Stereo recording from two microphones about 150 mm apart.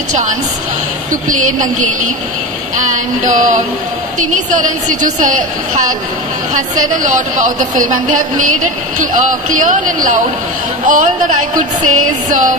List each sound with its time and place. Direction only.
0.1 s a woman's voice: 55° right (ahead or behind)